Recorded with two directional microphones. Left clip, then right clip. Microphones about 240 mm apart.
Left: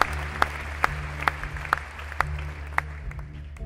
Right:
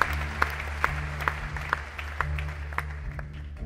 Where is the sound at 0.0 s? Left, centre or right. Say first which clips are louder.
Left 2 dB; centre.